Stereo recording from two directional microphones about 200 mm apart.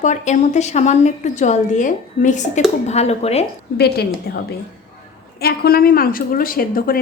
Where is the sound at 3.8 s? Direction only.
50° left (ahead or behind).